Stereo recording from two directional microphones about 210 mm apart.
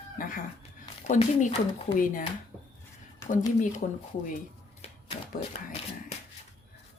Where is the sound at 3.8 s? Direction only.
35° left (ahead or behind).